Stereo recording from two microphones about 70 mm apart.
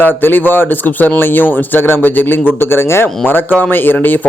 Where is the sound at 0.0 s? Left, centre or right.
Left.